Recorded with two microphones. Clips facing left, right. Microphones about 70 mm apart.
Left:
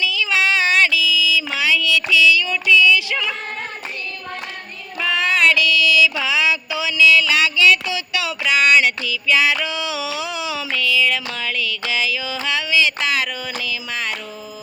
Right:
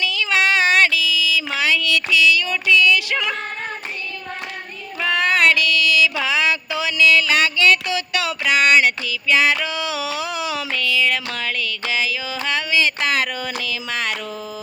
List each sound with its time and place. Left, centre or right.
0.0 s child singing: right
4.9 s female singing: right
6.2 s a sound: right